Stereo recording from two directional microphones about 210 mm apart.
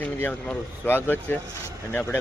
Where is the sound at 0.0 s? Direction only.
10° left (ahead or behind).